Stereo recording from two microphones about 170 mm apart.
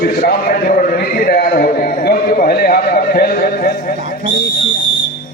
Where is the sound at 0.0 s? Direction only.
65° left (ahead or behind).